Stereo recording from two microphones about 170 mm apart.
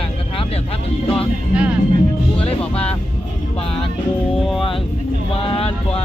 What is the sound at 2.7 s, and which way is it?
Music, 35° left (ahead or behind).